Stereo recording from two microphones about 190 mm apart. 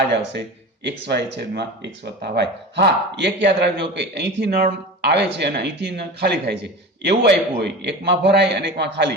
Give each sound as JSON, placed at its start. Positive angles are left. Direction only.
{"t": 0.9, "sound": "speech", "side_deg": -65}